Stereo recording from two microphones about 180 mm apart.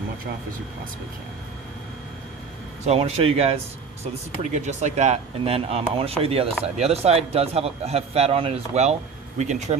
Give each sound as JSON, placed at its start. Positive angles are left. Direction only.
{"t": 2.8, "sound": "speech", "side_deg": -35}